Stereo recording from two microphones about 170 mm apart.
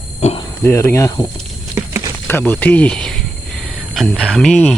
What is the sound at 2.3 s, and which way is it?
Speech, 10° left (ahead or behind).